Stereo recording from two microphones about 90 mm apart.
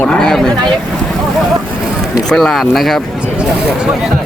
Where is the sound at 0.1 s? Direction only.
5° left (ahead or behind).